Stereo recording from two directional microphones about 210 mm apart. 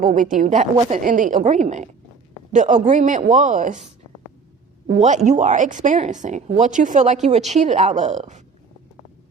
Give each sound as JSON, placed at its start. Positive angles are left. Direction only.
{"t": 0.2, "sound": "speech", "side_deg": -40}
{"t": 4.9, "sound": "speech", "side_deg": -35}